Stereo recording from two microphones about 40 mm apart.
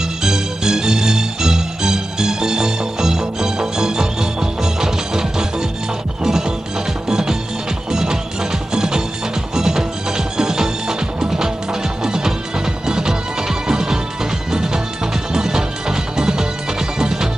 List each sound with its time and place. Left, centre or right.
0.0 s music: centre